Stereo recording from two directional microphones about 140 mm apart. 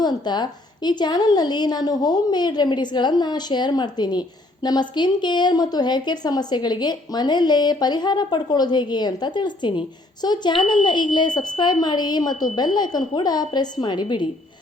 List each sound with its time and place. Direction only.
0.0 s a woman's voice: 30° left (ahead or behind)